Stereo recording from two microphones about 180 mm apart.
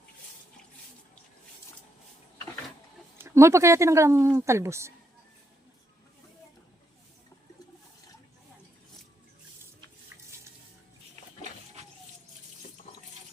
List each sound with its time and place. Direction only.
3.2 s speech: 15° right (ahead or behind)